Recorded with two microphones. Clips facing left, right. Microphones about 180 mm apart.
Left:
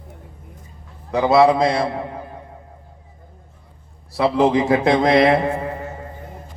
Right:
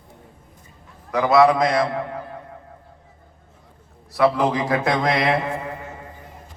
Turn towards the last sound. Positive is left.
turn(degrees=45)  # may be behind; listen again after turning